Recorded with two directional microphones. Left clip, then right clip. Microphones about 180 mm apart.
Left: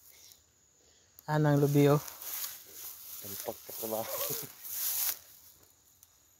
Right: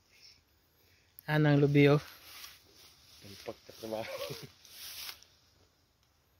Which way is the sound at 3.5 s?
20° right (ahead or behind).